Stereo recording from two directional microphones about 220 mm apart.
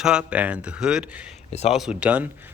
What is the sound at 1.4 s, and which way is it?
Speech, 30° left (ahead or behind).